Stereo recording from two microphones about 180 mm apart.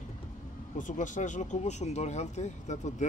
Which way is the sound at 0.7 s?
45° left (ahead or behind).